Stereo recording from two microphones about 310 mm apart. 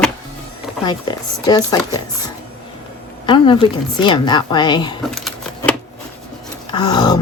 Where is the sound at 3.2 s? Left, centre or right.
Centre.